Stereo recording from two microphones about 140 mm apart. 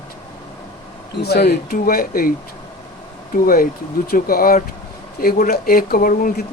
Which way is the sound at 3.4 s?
90° left.